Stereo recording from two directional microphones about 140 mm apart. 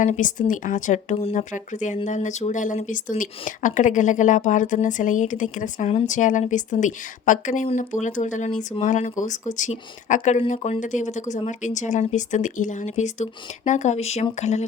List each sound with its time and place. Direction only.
0.0 s speech: 65° left (ahead or behind)
1.2 s speech: 45° left (ahead or behind)
1.5 s speech: 60° left (ahead or behind)